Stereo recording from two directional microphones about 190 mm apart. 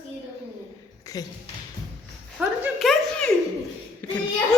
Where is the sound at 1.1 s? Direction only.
15° left (ahead or behind).